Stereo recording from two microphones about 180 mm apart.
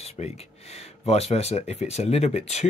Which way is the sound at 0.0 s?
35° left (ahead or behind).